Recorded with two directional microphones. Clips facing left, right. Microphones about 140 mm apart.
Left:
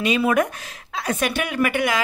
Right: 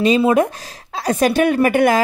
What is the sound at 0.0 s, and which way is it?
Speech, 30° right (ahead or behind).